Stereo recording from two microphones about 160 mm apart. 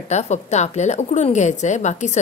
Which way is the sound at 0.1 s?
45° left (ahead or behind).